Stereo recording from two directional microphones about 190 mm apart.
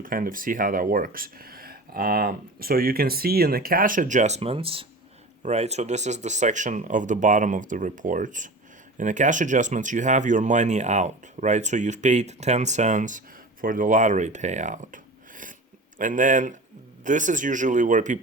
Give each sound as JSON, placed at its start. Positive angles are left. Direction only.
{"t": 0.0, "sound": "speech", "side_deg": -45}